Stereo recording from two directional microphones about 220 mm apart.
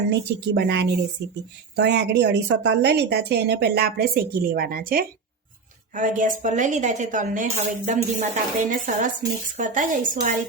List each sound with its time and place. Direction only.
0.1 s a woman's voice: 50° right (ahead or behind)